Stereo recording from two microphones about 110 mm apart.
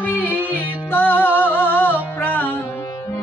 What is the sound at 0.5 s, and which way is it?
Music, 15° left (ahead or behind).